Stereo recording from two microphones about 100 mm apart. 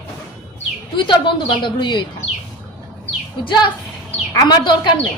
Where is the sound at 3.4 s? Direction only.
50° left (ahead or behind).